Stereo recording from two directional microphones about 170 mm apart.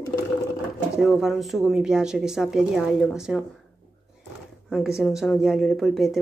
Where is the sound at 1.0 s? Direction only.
Centre (ahead or behind).